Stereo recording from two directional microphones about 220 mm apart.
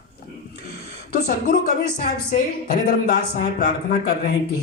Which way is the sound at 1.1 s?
35° left (ahead or behind).